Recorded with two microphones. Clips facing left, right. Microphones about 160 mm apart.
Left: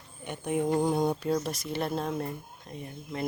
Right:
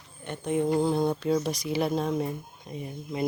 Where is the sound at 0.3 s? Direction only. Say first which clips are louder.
Right 2 dB; 10° left (ahead or behind).